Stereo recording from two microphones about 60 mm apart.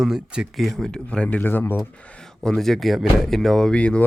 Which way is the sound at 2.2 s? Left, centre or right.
Centre.